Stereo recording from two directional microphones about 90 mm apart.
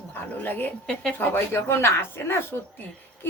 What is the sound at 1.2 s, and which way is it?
Speech, 25° left (ahead or behind).